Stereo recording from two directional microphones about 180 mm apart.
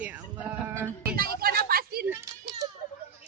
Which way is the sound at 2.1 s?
15° right (ahead or behind).